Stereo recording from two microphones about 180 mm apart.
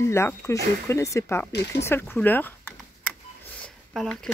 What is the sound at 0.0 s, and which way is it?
Speech, 15° left (ahead or behind).